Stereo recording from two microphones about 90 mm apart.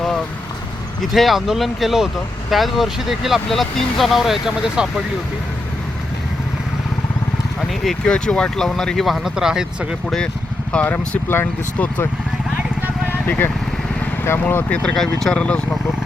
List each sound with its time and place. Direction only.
1.0 s speech: centre (ahead or behind)
7.9 s speech: 10° left (ahead or behind); by 9.6 s 5° right (ahead or behind)
10.7 s speech: 15° left (ahead or behind)
13.2 s speech: 20° left (ahead or behind)
14.8 s speech: 5° left (ahead or behind)